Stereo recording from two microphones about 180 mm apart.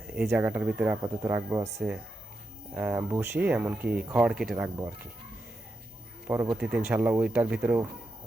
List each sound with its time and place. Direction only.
0.1 s speech: 10° right (ahead or behind)
2.7 s speech: 15° right (ahead or behind)
4.5 s speech: 15° right (ahead or behind)
6.2 s speech: 15° right (ahead or behind)